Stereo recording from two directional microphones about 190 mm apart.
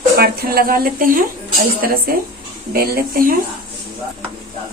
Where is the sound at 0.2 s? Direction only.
55° right (ahead or behind).